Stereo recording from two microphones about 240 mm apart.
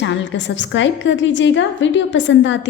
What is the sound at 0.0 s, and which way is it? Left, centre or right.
A woman's voice, left.